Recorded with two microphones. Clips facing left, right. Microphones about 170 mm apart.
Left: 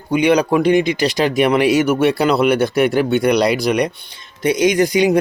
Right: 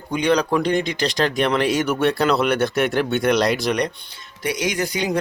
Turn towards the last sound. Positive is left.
turn(degrees=15)  # may be behind; listen again after turning